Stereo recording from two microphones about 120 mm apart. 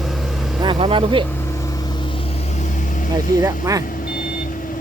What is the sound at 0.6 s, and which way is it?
Speech, 45° right (ahead or behind).